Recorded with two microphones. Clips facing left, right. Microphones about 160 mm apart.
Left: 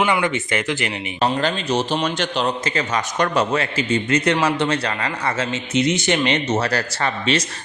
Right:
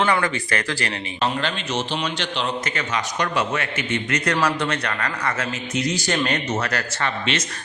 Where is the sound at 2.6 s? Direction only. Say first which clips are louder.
Left 3 dB; 35° left (ahead or behind).